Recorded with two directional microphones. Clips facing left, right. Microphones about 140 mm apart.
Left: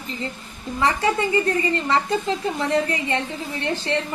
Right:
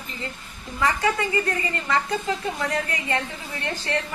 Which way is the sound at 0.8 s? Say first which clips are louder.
Left 2 dB; 30° left (ahead or behind).